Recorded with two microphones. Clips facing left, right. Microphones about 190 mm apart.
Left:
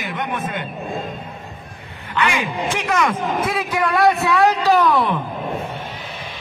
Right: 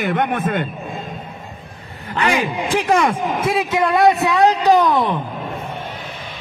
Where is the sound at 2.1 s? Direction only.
35° right (ahead or behind); by 5.2 s 20° right (ahead or behind).